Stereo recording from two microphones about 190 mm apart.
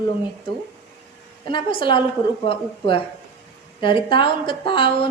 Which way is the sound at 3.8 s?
25° left (ahead or behind).